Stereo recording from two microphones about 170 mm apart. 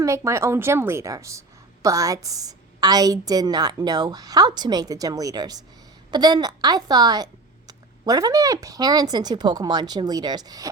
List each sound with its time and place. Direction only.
0.0 s a woman's voice: 15° right (ahead or behind)